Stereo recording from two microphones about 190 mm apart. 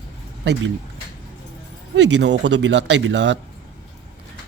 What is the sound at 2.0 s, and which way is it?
Speech, 65° right (ahead or behind).